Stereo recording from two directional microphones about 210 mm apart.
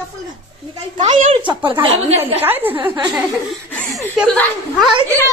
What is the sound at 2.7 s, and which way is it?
Speech, 25° right (ahead or behind).